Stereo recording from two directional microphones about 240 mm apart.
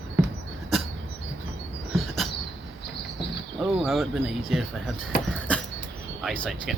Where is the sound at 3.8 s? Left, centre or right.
Centre.